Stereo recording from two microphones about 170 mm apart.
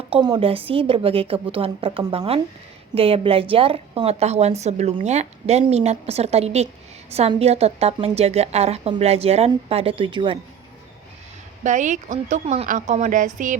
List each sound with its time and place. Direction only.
0.1 s a woman's voice: 30° right (ahead or behind)
11.6 s speech: 45° right (ahead or behind)